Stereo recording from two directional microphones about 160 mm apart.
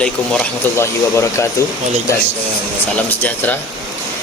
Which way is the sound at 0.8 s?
15° left (ahead or behind).